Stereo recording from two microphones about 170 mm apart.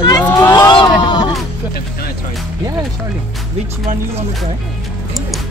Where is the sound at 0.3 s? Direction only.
20° left (ahead or behind).